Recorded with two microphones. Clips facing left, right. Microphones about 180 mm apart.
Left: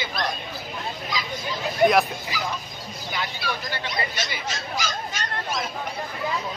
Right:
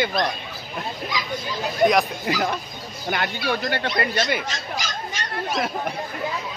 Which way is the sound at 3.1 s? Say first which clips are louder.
Right 6 dB; 60° right (ahead or behind).